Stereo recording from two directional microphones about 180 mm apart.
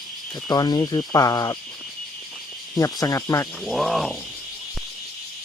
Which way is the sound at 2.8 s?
20° left (ahead or behind).